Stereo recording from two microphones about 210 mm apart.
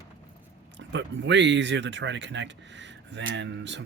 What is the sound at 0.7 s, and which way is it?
Speech, 60° right (ahead or behind).